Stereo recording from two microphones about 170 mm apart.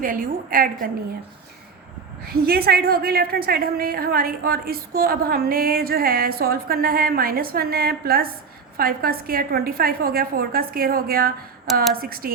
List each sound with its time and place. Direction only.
0.0 s a woman's voice: 55° right (ahead or behind)
2.2 s a woman's voice: 65° right (ahead or behind)